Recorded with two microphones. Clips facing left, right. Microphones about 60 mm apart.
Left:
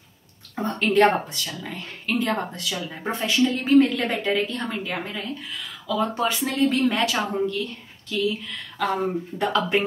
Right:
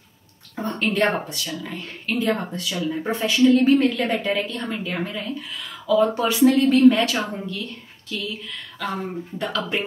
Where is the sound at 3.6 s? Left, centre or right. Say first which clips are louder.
Right 1 dB; centre.